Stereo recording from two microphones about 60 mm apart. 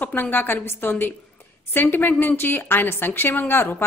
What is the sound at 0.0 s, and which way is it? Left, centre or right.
A woman's voice, left.